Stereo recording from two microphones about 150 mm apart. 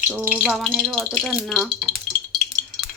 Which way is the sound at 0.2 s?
10° right (ahead or behind).